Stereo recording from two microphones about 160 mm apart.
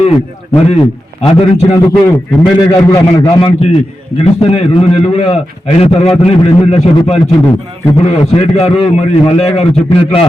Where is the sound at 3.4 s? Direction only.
40° left (ahead or behind).